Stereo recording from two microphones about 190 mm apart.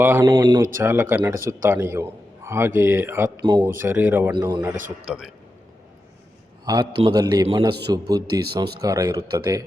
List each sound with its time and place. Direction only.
0.0 s a man's voice: 15° right (ahead or behind)
3.4 s speech: 25° right (ahead or behind)
3.8 s a man's voice: 10° right (ahead or behind)
4.3 s speech: 25° right (ahead or behind)
5.1 s a man's voice: 5° right (ahead or behind)
6.7 s speech: 20° right (ahead or behind)